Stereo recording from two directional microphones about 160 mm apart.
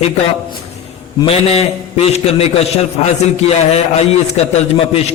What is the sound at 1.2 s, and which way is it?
A man's voice, 40° left (ahead or behind).